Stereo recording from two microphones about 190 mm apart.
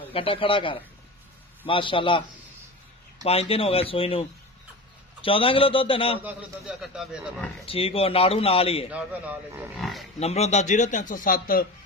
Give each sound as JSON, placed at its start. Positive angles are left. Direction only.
{"t": 0.1, "sound": "a man's voice", "side_deg": 30}
{"t": 3.2, "sound": "a man's voice", "side_deg": 30}
{"t": 6.2, "sound": "speech", "side_deg": -5}
{"t": 7.6, "sound": "a man's voice", "side_deg": 30}
{"t": 8.9, "sound": "speech", "side_deg": -10}
{"t": 10.2, "sound": "a man's voice", "side_deg": 35}